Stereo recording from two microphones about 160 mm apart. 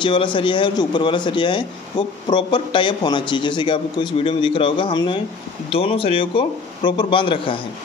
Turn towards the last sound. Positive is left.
turn(degrees=35)  # may be behind; listen again after turning